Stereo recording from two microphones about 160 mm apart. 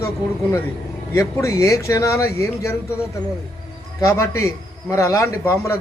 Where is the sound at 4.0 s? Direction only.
20° left (ahead or behind).